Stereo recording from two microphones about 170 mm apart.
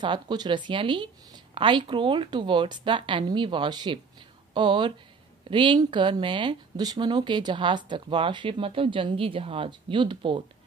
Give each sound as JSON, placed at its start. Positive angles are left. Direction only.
{"t": 0.0, "sound": "speech", "side_deg": -25}